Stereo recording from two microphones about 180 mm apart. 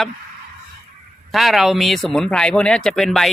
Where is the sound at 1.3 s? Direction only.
Centre (ahead or behind).